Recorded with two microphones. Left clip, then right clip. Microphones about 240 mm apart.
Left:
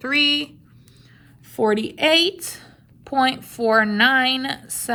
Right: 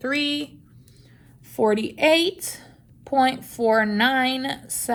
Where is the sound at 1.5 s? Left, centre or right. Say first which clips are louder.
Left 1 dB; left.